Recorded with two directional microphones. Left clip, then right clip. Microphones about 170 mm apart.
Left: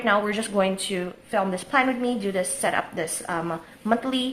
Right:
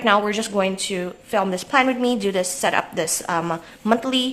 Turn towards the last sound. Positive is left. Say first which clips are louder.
# right 4 dB
turn(degrees=-25)  # may be behind; listen again after turning